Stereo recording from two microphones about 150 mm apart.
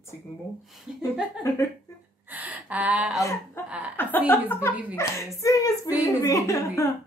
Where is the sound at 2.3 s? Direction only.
10° right (ahead or behind).